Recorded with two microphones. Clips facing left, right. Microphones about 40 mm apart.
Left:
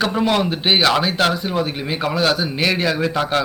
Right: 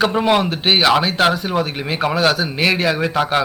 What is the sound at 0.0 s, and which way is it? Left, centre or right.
A man's voice, centre.